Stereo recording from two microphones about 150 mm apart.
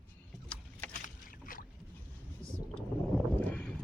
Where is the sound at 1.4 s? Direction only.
65° left (ahead or behind).